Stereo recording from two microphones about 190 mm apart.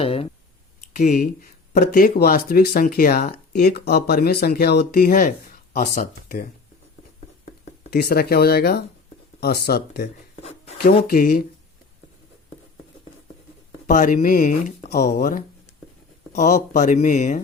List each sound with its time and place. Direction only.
0.0 s clicking: 30° left (ahead or behind)
0.9 s speech: 45° left (ahead or behind)
7.9 s speech: 55° left (ahead or behind)
13.8 s speech: 45° left (ahead or behind)